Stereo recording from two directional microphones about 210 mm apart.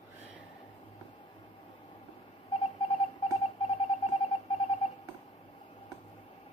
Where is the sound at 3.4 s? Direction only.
25° left (ahead or behind).